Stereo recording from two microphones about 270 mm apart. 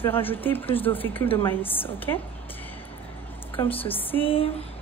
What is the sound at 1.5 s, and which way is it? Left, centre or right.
Speech, centre.